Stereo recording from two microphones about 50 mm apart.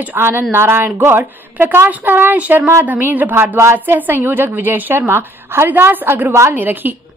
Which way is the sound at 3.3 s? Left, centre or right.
Right.